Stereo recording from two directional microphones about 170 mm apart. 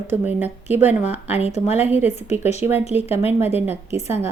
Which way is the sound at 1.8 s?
10° right (ahead or behind).